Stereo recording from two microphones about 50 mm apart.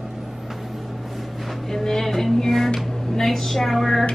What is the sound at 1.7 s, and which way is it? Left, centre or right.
Speech, centre.